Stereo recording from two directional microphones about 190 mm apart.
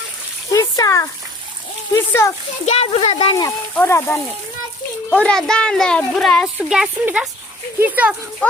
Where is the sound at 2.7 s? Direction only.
30° left (ahead or behind).